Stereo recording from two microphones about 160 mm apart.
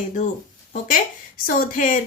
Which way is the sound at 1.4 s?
60° left (ahead or behind).